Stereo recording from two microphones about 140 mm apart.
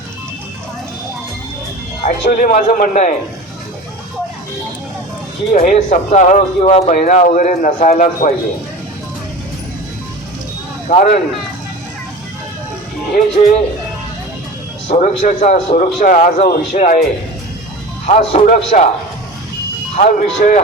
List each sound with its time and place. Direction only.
2.0 s speech: 80° left
5.5 s a man's voice: 70° left (ahead or behind); by 6.9 s 50° left (ahead or behind)
6.9 s speech: 65° left (ahead or behind)
10.8 s a man's voice: 60° left (ahead or behind)
13.4 s a man's voice: 65° left (ahead or behind)
14.8 s a man's voice: 60° left (ahead or behind)
18.0 s speech: 45° left (ahead or behind)
18.4 s a man's voice: 65° left (ahead or behind)
20.0 s speech: 65° left (ahead or behind)